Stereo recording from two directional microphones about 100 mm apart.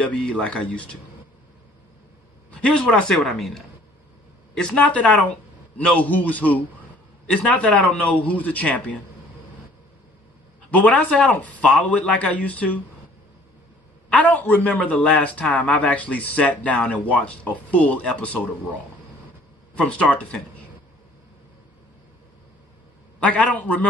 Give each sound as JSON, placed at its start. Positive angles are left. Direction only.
{"t": 0.0, "sound": "a man's voice", "side_deg": 10}
{"t": 2.6, "sound": "a man's voice", "side_deg": 10}
{"t": 10.7, "sound": "a man's voice", "side_deg": 15}
{"t": 14.0, "sound": "a man's voice", "side_deg": 15}
{"t": 19.7, "sound": "a man's voice", "side_deg": 10}
{"t": 23.2, "sound": "a man's voice", "side_deg": 15}